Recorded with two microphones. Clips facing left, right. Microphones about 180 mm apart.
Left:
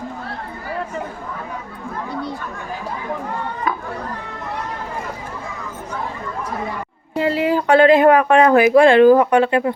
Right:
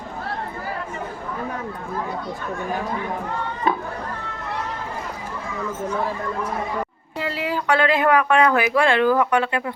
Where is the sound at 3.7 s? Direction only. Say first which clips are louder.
Right 3 dB; 30° right (ahead or behind).